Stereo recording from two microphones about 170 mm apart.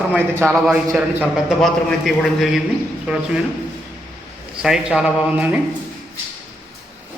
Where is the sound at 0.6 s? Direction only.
Centre (ahead or behind).